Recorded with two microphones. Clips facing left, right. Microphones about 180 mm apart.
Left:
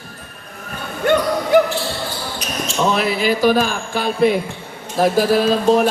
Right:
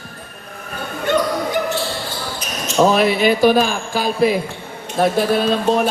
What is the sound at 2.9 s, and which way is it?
Speech, 30° right (ahead or behind).